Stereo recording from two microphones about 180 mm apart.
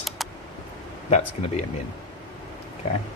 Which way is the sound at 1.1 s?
40° left (ahead or behind).